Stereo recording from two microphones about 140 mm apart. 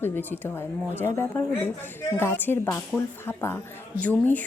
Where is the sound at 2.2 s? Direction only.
15° left (ahead or behind).